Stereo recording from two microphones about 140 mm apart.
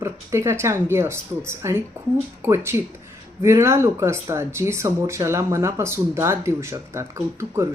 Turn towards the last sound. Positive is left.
turn(degrees=-20)  # may be behind; listen again after turning